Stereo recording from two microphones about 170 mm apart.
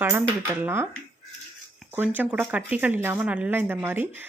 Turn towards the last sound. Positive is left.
turn(degrees=-10)  # may be behind; listen again after turning